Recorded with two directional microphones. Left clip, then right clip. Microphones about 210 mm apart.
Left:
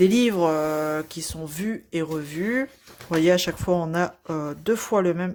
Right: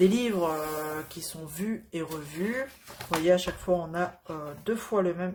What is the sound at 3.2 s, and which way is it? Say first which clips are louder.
Speech: left 4 dB; 45° left (ahead or behind).